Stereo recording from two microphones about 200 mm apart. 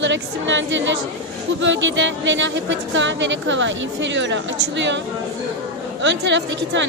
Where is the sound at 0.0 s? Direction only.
65° right (ahead or behind).